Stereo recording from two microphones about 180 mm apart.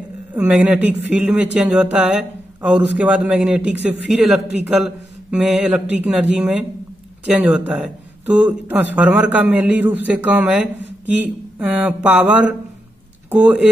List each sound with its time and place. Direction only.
0.3 s a man's voice: 10° right (ahead or behind)